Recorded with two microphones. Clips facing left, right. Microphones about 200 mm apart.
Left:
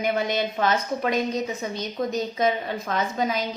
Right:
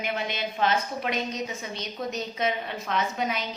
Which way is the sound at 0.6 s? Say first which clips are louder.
Even; 45° left (ahead or behind).